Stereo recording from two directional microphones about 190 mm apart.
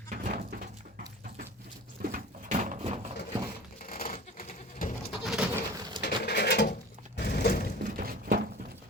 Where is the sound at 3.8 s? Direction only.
50° left (ahead or behind).